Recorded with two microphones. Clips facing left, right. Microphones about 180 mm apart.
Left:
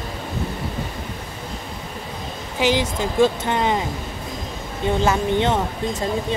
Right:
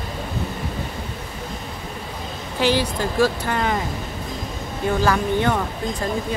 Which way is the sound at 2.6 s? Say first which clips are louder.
Even; 20° left (ahead or behind).